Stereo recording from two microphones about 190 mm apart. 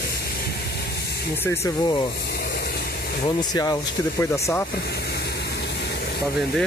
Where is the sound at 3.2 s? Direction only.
20° left (ahead or behind).